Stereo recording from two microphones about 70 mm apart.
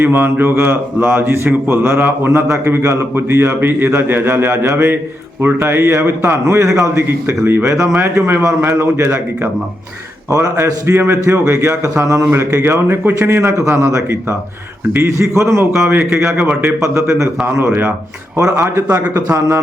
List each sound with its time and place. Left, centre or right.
0.0 s speech: right
10.2 s a man's voice: right
10.8 s a man's voice: right
12.6 s speech: right
18.3 s a man's voice: right